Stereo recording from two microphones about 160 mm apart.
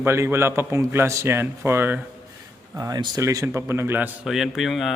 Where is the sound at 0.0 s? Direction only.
15° right (ahead or behind).